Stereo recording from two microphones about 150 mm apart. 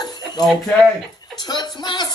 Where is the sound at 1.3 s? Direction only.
25° left (ahead or behind).